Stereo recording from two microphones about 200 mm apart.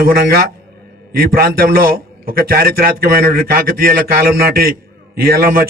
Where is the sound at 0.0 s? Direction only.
50° right (ahead or behind).